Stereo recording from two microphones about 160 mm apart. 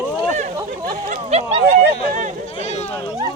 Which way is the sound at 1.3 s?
40° right (ahead or behind).